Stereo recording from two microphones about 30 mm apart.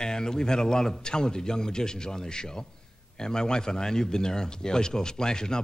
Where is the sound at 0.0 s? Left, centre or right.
Left.